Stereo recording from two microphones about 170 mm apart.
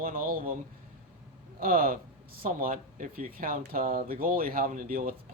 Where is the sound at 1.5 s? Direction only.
55° right (ahead or behind).